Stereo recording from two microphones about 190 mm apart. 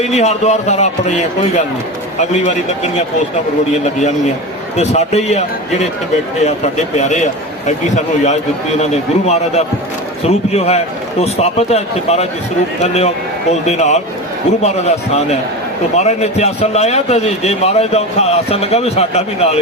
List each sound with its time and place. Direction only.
0.0 s speech: 35° left (ahead or behind)
4.8 s speech: 35° left (ahead or behind)
6.9 s speech: 40° left (ahead or behind)